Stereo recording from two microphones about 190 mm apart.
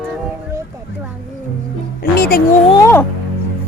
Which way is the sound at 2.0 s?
55° left (ahead or behind).